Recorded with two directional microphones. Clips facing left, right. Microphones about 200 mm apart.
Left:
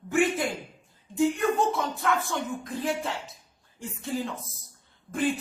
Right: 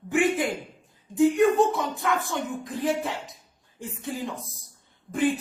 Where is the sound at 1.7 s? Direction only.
15° right (ahead or behind).